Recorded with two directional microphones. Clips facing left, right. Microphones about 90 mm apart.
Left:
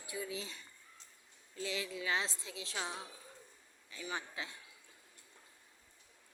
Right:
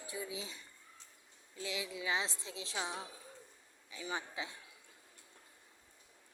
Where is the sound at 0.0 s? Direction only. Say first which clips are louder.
Left 1 dB; 30° right (ahead or behind).